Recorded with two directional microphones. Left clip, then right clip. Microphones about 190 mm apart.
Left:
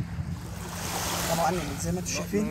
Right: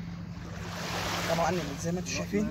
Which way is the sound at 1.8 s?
Centre (ahead or behind).